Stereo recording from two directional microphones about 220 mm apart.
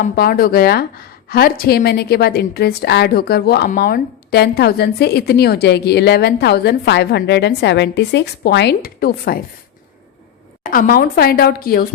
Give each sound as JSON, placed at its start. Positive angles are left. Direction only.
{"t": 0.0, "sound": "a woman's voice", "side_deg": 40}
{"t": 10.6, "sound": "a woman's voice", "side_deg": 40}